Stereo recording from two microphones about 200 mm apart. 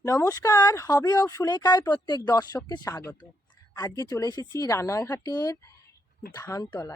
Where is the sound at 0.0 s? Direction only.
15° left (ahead or behind).